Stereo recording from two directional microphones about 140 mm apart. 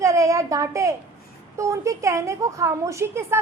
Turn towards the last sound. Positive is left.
turn(degrees=-20)  # may be behind; listen again after turning